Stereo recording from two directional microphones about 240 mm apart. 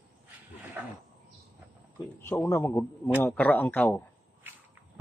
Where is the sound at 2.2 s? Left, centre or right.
Centre.